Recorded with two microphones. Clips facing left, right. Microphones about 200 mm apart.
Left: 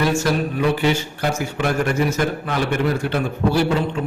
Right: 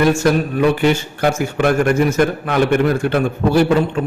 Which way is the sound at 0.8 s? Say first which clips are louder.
Right 4 dB; 55° right (ahead or behind).